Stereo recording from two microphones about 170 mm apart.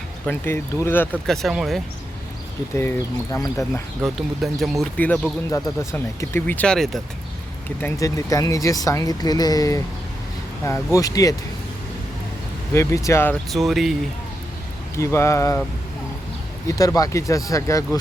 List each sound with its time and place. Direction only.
0.3 s speech: 15° left (ahead or behind)
1.3 s speech: centre (ahead or behind)
3.3 s speech: 20° left (ahead or behind)
4.0 s speech: centre (ahead or behind)
7.8 s speech: 15° left (ahead or behind)
12.7 s speech: 20° left (ahead or behind)
13.5 s speech: centre (ahead or behind)
14.9 s speech: 15° left (ahead or behind)
16.6 s speech: 20° left (ahead or behind)